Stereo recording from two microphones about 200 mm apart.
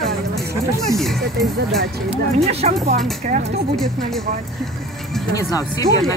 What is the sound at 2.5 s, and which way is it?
Speech, 30° right (ahead or behind).